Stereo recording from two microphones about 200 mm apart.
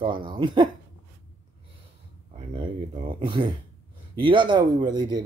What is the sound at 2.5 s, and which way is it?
Speech, 25° right (ahead or behind).